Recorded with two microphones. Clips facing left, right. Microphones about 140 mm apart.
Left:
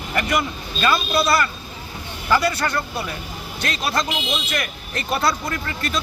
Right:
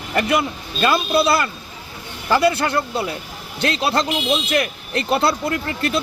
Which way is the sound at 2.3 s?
25° right (ahead or behind).